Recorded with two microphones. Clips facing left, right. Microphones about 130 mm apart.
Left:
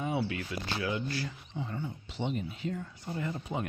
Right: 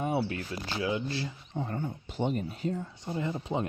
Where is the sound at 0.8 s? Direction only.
25° right (ahead or behind).